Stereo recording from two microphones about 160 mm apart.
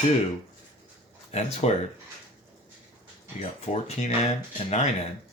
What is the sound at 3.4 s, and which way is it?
Speech, 40° left (ahead or behind).